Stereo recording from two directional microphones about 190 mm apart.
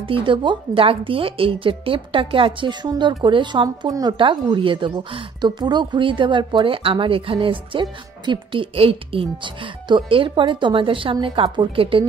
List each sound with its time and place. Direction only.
0.0 s speech: 25° right (ahead or behind)